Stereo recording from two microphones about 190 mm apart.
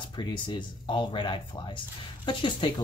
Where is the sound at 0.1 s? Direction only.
25° left (ahead or behind).